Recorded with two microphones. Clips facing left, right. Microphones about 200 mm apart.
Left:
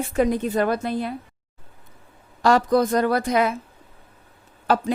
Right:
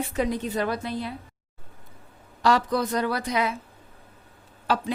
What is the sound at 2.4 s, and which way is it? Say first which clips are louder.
A woman's voice: left 5 dB; 45° left (ahead or behind).